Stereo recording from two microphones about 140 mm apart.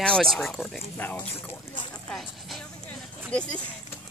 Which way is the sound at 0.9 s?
15° left (ahead or behind).